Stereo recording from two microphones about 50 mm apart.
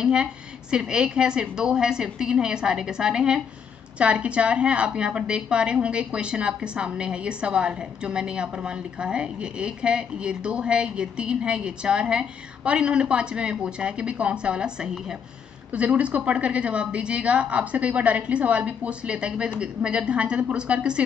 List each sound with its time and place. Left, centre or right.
0.0 s a woman's voice: centre